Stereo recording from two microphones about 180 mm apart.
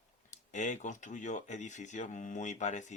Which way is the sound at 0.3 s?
40° left (ahead or behind).